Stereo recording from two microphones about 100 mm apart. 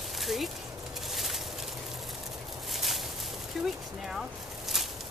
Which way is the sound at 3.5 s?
5° right (ahead or behind).